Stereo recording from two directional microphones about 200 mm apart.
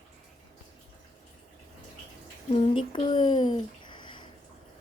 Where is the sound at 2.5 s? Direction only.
25° left (ahead or behind).